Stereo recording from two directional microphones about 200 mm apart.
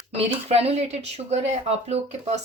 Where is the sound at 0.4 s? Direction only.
30° right (ahead or behind).